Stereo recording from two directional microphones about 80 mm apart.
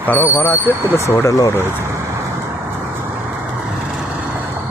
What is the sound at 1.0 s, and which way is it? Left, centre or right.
Speech, left.